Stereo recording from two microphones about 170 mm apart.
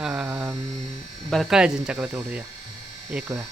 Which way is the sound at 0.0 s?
5° right (ahead or behind).